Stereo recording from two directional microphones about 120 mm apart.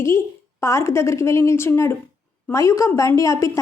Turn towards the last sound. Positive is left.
turn(degrees=25)  # may be behind; listen again after turning